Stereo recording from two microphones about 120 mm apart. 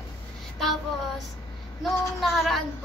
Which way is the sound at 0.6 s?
Centre (ahead or behind).